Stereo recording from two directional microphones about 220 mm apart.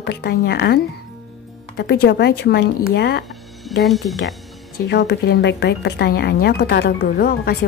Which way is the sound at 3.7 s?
Centre (ahead or behind).